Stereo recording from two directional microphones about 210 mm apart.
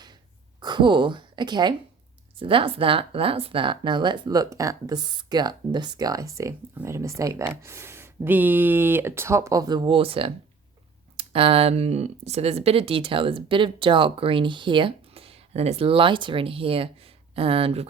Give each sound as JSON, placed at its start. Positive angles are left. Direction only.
{"t": 0.6, "sound": "speech", "side_deg": -20}